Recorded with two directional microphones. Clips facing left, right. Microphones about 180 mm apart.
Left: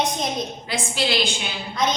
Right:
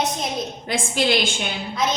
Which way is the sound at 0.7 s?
50° right (ahead or behind).